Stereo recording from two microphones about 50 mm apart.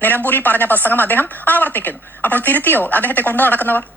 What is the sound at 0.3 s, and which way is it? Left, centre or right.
Speech, left.